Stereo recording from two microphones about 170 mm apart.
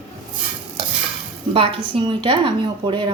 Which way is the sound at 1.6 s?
30° right (ahead or behind).